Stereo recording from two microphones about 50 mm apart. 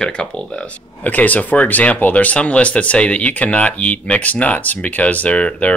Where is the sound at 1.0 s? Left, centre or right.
Left.